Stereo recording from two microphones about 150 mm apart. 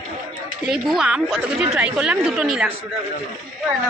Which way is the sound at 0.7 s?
5° right (ahead or behind).